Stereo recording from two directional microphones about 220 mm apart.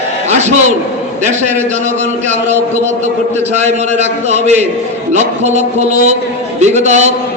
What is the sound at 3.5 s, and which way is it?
A man's voice, 30° right (ahead or behind).